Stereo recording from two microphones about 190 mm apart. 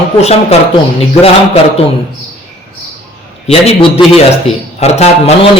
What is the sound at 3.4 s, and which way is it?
Speech, 30° left (ahead or behind).